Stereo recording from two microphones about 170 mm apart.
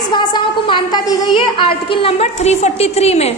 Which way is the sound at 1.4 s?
30° left (ahead or behind).